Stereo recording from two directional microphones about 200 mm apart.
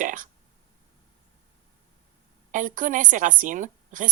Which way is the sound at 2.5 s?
40° right (ahead or behind).